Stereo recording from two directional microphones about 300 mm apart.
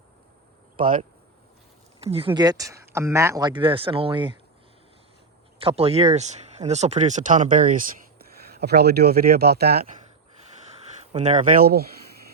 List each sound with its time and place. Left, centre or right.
0.8 s speech: right
5.5 s speech: centre
11.1 s speech: right